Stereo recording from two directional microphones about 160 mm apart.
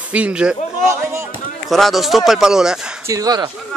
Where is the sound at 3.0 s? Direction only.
20° right (ahead or behind).